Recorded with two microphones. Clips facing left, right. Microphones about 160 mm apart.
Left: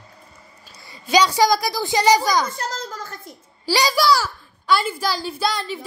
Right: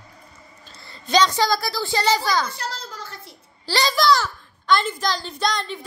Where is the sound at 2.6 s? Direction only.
45° left (ahead or behind).